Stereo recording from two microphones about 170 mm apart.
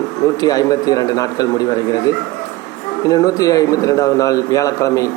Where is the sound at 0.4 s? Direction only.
20° left (ahead or behind).